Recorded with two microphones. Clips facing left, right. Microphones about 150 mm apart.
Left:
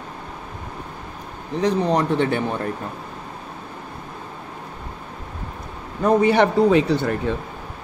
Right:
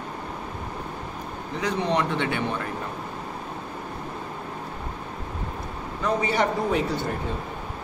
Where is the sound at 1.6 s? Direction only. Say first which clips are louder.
Left 5 dB; 40° left (ahead or behind).